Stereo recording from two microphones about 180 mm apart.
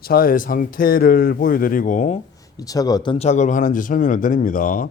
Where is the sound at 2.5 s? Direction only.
20° left (ahead or behind); by 4.9 s 45° left (ahead or behind).